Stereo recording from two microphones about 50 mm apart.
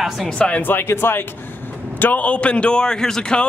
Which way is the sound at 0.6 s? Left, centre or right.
Left.